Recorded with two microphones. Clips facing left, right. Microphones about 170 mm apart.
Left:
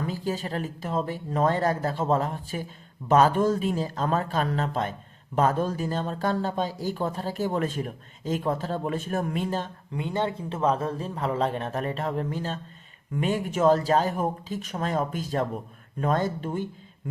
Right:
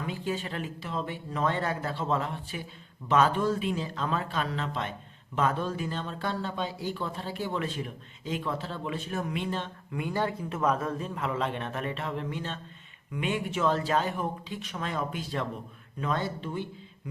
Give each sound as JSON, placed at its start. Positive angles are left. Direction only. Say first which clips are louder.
{"t": 0.0, "sound": "speech", "louder": "left 3 dB", "side_deg": 40}
{"t": 10.0, "sound": "speech", "louder": "left 2 dB", "side_deg": 25}